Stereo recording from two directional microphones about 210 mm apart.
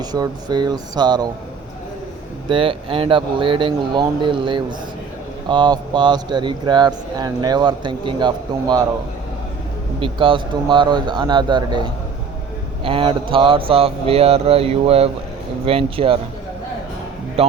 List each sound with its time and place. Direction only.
0.0 s speech: 20° right (ahead or behind)
2.5 s speech: 25° right (ahead or behind)
10.0 s speech: 25° right (ahead or behind)